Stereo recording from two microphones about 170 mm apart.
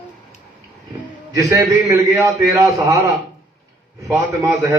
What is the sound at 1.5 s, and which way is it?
A man's voice, 15° right (ahead or behind).